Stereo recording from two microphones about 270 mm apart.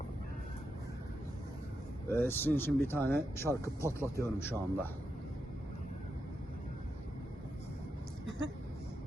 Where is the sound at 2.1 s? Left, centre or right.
Centre.